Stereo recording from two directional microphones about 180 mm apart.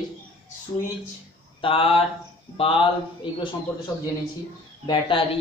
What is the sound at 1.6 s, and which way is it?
Speech, 30° left (ahead or behind).